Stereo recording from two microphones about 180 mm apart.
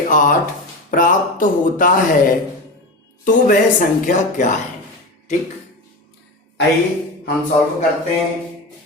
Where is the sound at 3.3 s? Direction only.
50° left (ahead or behind).